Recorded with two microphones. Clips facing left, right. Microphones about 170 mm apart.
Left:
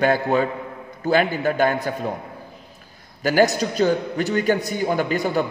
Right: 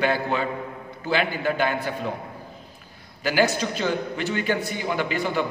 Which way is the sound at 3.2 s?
40° left (ahead or behind).